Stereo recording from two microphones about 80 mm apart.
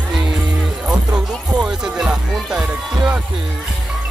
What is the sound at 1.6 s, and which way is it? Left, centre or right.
Speech, centre.